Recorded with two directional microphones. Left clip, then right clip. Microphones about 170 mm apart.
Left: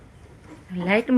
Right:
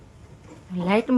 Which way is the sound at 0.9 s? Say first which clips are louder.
Left 1 dB; 15° right (ahead or behind).